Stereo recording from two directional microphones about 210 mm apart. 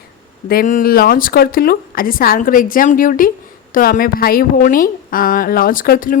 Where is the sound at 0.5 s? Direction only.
40° left (ahead or behind).